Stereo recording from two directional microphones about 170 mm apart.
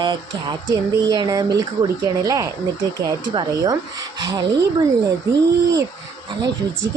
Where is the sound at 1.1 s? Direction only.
25° right (ahead or behind).